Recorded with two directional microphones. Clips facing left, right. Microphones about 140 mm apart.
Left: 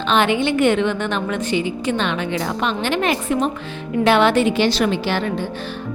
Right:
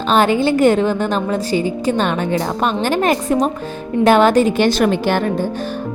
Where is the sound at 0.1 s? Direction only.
40° right (ahead or behind).